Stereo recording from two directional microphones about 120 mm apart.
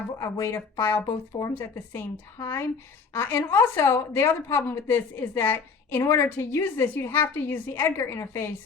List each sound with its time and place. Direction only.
0.2 s a woman's voice: 20° left (ahead or behind)